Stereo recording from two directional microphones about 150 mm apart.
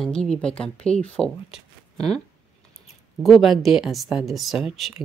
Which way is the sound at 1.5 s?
5° left (ahead or behind).